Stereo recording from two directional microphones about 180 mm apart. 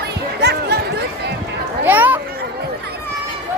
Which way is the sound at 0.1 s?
65° right (ahead or behind).